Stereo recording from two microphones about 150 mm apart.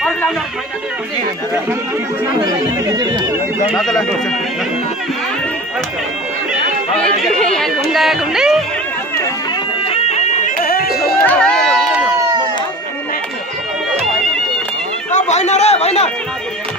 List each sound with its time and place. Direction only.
3.0 s speech: 25° right (ahead or behind)
3.7 s speech: centre (ahead or behind)
7.3 s speech: 5° left (ahead or behind)
9.8 s music: 45° left (ahead or behind)
10.6 s a sound: 75° left (ahead or behind)
11.2 s run: 5° left (ahead or behind)
15.0 s a sound: 50° left (ahead or behind)